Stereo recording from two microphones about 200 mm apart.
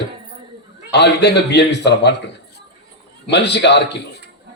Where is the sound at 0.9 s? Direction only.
55° left (ahead or behind).